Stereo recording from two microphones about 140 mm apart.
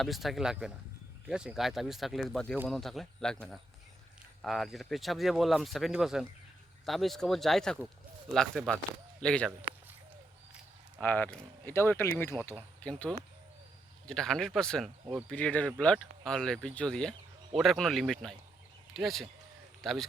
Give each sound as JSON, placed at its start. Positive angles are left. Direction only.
{"t": 0.0, "sound": "speech", "side_deg": 0}
{"t": 4.4, "sound": "speech", "side_deg": 0}
{"t": 11.0, "sound": "speech", "side_deg": 10}